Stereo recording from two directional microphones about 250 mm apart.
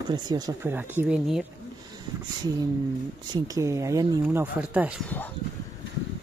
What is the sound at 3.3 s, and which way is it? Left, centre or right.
Speech, centre.